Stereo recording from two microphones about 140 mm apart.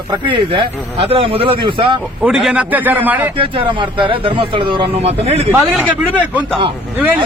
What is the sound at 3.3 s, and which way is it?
Speech, 35° right (ahead or behind).